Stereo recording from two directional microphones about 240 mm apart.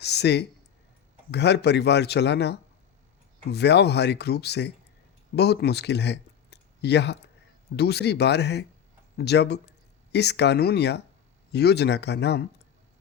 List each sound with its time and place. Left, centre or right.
0.0 s speech: left